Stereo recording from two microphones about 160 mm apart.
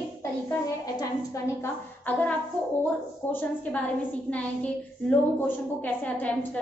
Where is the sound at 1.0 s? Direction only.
15° left (ahead or behind).